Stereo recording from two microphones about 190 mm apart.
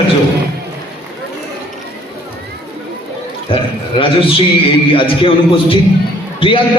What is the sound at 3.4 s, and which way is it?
A man's voice, 30° left (ahead or behind).